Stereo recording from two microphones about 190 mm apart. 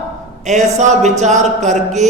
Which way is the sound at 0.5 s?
40° right (ahead or behind).